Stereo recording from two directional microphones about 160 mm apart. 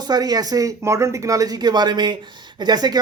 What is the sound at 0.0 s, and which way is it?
Speech, 25° right (ahead or behind).